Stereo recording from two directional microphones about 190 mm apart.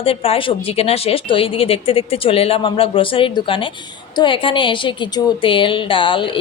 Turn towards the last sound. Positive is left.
turn(degrees=25)  # may be behind; listen again after turning